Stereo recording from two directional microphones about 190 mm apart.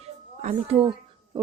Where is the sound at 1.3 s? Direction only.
25° right (ahead or behind).